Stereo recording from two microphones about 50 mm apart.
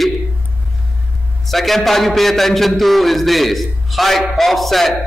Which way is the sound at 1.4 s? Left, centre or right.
Centre.